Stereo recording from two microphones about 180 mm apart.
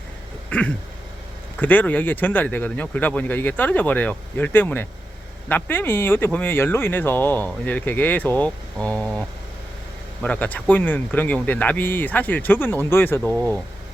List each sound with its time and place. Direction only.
0.5 s speech: 5° left (ahead or behind)
10.2 s speech: 10° left (ahead or behind)